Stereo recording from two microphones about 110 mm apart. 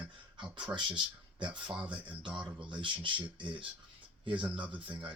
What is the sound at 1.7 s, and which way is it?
Speech, 10° right (ahead or behind).